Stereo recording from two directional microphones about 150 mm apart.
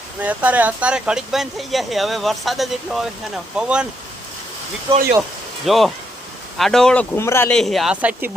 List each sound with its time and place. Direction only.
0.2 s speech: 10° right (ahead or behind)
5.6 s speech: centre (ahead or behind); by 7.5 s 15° left (ahead or behind)
7.5 s speech: centre (ahead or behind)